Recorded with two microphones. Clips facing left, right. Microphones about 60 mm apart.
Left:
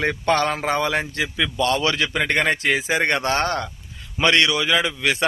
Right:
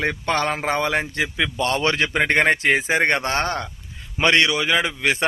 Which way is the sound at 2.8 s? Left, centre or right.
Right.